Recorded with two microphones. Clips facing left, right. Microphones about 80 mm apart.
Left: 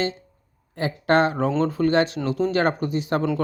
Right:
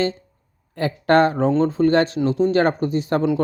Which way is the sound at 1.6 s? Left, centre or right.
Right.